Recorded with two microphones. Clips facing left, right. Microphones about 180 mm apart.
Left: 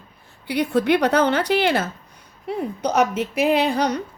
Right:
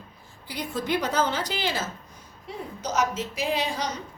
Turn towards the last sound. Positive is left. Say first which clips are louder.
# left 9 dB
turn(degrees=60)  # may be behind; listen again after turning